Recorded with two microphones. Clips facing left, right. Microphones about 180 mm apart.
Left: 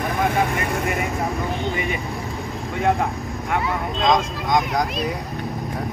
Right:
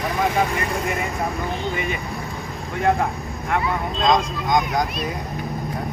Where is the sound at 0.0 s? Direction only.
60° left (ahead or behind).